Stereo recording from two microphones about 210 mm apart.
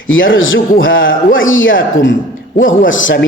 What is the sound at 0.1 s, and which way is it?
A man's voice, 65° left (ahead or behind).